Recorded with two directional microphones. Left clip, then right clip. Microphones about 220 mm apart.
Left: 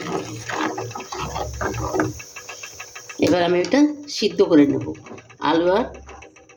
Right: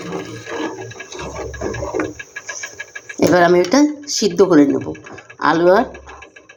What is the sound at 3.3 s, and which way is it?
Speech, 15° right (ahead or behind).